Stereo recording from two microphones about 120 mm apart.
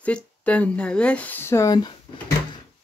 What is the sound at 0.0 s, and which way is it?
Speech, 10° left (ahead or behind).